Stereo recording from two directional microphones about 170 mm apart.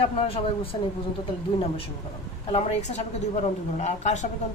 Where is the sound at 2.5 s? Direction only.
40° left (ahead or behind).